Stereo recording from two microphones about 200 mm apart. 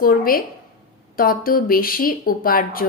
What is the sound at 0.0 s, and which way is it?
A woman's voice, 45° left (ahead or behind).